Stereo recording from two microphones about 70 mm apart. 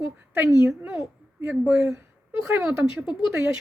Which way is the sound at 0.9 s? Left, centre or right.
Right.